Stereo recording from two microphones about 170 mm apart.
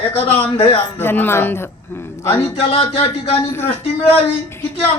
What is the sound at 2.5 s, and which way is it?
Speech, 35° left (ahead or behind).